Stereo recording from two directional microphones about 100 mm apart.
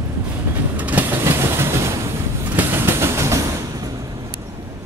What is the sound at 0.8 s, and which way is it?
Vehicle, 15° right (ahead or behind).